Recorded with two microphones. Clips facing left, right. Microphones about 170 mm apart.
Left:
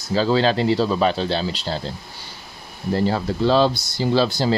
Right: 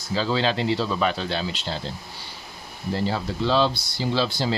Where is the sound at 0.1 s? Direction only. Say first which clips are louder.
Left 5 dB; 40° left (ahead or behind).